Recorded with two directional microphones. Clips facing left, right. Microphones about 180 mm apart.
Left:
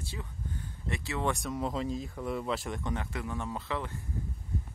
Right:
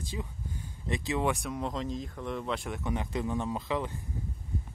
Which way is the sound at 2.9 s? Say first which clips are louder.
Right 4 dB; 20° right (ahead or behind).